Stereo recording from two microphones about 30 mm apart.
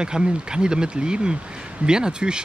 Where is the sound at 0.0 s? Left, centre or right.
Right.